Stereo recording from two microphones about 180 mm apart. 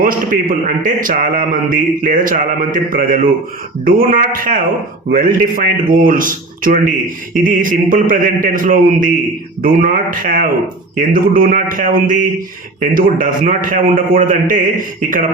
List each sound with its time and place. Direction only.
0.0 s mantra: 50° right (ahead or behind)